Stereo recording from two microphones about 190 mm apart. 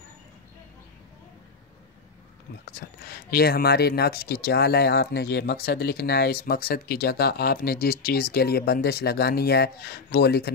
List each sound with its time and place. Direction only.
2.6 s speech: 55° left (ahead or behind)